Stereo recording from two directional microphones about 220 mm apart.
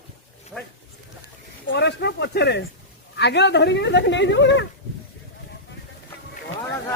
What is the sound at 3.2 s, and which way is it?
Speech, 50° left (ahead or behind).